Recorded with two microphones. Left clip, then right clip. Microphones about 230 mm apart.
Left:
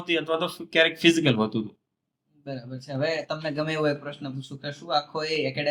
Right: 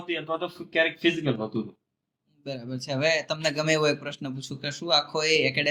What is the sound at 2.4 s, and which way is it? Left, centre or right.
Speech, right.